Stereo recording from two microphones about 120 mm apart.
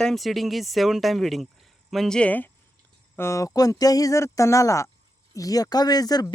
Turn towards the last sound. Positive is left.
turn(degrees=30)  # may be behind; listen again after turning